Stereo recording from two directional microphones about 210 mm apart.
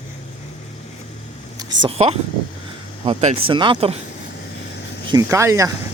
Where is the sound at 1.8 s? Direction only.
30° right (ahead or behind).